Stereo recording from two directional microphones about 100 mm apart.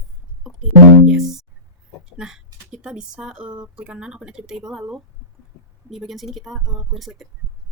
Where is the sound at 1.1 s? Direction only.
5° right (ahead or behind).